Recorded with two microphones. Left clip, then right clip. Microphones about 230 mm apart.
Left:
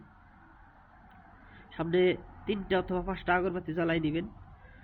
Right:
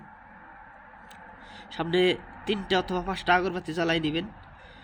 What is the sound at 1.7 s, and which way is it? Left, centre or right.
Speech, centre.